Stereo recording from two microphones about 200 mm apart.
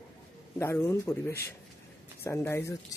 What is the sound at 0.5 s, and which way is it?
Speech, 10° left (ahead or behind).